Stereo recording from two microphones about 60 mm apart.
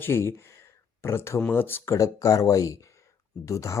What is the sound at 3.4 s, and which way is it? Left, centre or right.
Speech, left.